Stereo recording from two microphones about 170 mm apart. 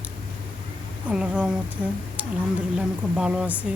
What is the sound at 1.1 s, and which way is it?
Speech, 5° right (ahead or behind).